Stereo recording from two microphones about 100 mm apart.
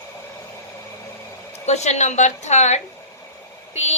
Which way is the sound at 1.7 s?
90° left.